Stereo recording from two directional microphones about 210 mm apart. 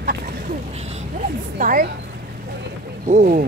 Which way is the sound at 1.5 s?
40° right (ahead or behind).